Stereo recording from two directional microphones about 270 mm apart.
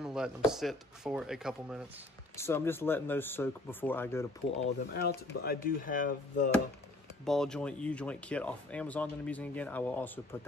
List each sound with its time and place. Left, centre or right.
0.0 s speech: centre
2.3 s speech: centre
4.9 s speech: left
7.2 s speech: centre